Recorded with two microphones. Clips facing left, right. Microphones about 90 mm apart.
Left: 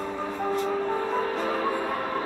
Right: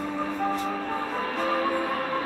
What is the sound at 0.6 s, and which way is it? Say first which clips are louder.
Music: left 3 dB; 25° left (ahead or behind).